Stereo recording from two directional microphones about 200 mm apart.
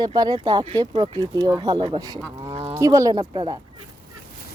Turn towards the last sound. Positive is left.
turn(degrees=-20)  # may be behind; listen again after turning